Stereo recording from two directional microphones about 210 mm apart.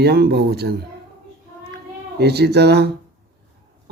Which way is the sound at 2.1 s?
50° right (ahead or behind).